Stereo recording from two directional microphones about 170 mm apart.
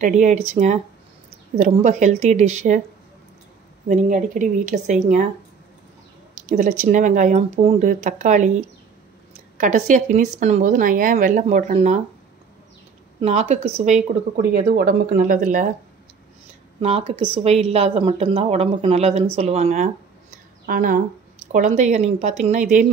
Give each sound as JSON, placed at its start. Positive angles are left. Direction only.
{"t": 0.0, "sound": "a woman's voice", "side_deg": -45}
{"t": 3.9, "sound": "a woman's voice", "side_deg": -50}
{"t": 6.3, "sound": "a woman's voice", "side_deg": -50}
{"t": 7.8, "sound": "a woman's voice", "side_deg": -50}
{"t": 13.2, "sound": "a woman's voice", "side_deg": -40}
{"t": 14.3, "sound": "speech", "side_deg": -60}
{"t": 15.1, "sound": "a woman's voice", "side_deg": -50}
{"t": 16.8, "sound": "a woman's voice", "side_deg": -40}
{"t": 20.6, "sound": "speech", "side_deg": -55}
{"t": 21.5, "sound": "a woman's voice", "side_deg": -45}